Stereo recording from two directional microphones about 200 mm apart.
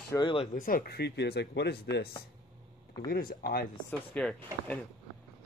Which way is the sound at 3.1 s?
50° left (ahead or behind).